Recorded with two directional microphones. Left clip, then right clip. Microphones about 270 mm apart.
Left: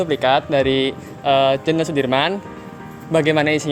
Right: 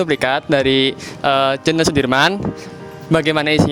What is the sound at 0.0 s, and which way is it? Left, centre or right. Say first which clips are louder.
Speech: even; right.